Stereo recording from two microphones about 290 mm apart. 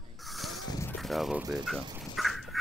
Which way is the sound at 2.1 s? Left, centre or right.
Centre.